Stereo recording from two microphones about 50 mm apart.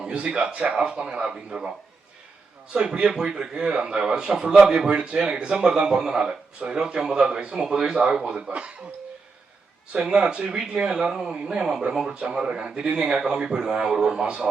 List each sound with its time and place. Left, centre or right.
0.1 s a man's voice: right
2.7 s speech: right
9.9 s a man's voice: right